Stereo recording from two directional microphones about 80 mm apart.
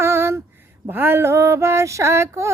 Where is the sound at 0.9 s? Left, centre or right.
Right.